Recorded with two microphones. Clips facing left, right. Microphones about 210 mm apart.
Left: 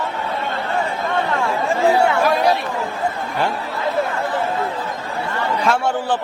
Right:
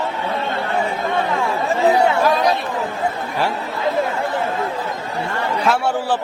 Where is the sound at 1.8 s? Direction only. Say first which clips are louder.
Right 1 dB; 20° right (ahead or behind).